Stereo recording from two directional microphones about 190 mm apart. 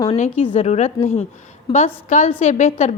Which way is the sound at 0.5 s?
35° left (ahead or behind).